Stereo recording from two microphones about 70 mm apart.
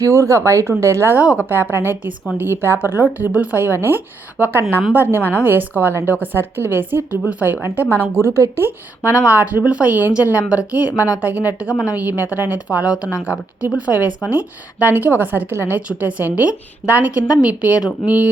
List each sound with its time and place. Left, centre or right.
0.0 s speech: right
1.1 s a woman's voice: right
1.7 s a woman's voice: right
8.0 s speech: right
9.0 s a woman's voice: right